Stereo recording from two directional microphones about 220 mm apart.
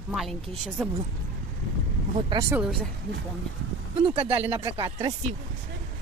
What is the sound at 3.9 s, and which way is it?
Speech, 25° right (ahead or behind).